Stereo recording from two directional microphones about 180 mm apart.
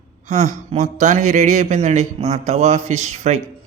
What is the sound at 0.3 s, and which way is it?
Speech, 40° right (ahead or behind).